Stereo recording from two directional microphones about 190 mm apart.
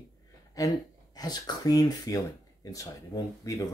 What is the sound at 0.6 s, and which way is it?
Speech, 20° left (ahead or behind).